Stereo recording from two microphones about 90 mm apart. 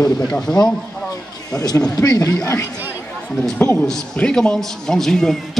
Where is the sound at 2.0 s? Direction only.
40° left (ahead or behind).